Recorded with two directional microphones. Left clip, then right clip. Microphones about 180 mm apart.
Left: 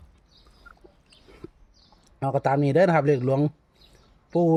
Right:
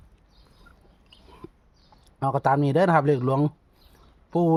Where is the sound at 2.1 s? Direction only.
15° right (ahead or behind).